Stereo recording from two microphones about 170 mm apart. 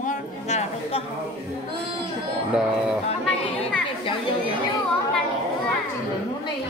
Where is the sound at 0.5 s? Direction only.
40° left (ahead or behind).